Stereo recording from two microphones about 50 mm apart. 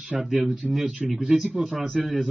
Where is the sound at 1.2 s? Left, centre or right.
Right.